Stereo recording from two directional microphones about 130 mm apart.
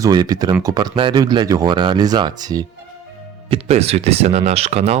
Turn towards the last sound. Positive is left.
turn(degrees=-55)  # may be behind; listen again after turning